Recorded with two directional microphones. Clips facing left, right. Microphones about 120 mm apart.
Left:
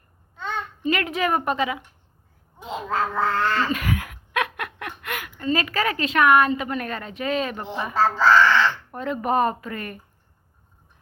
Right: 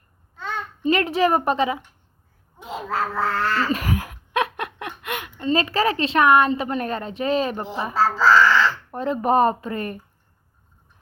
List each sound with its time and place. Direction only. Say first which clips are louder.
0.3 s babbling: even; 5° right (ahead or behind)
0.8 s a woman's voice: right 5 dB; 35° right (ahead or behind)
2.9 s cat: left 1 dB; 5° right (ahead or behind)
3.7 s a sound: right 2 dB; 35° right (ahead or behind)
5.1 s a woman's voice: right 3 dB; 25° right (ahead or behind)
7.9 s speech: even; 5° right (ahead or behind)
8.6 s speech: right 2 dB; 35° right (ahead or behind)